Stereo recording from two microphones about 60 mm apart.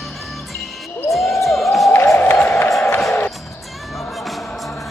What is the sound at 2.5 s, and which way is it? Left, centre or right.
Music, left.